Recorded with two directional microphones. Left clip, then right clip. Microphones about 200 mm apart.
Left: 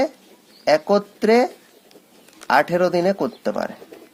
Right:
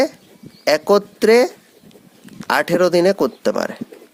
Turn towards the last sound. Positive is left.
turn(degrees=-40)  # may be behind; listen again after turning